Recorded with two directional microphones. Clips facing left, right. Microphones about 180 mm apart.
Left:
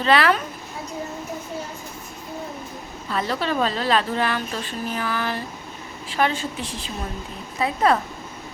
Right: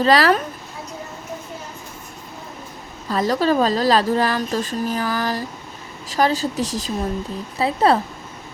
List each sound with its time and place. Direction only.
0.0 s a woman's voice: 35° right (ahead or behind)
3.1 s a woman's voice: 40° right (ahead or behind)